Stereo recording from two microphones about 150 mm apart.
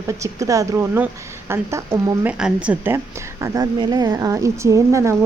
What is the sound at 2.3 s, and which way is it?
Cricket, 5° right (ahead or behind).